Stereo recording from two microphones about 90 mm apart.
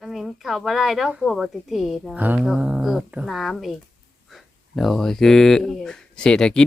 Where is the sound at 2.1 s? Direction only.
20° right (ahead or behind).